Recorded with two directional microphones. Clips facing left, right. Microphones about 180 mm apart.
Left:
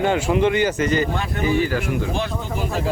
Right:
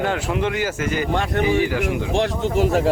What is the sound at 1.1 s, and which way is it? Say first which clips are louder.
Speech: right 5 dB; 70° right (ahead or behind).